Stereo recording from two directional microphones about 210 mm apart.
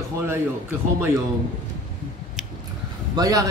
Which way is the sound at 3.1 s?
15° right (ahead or behind).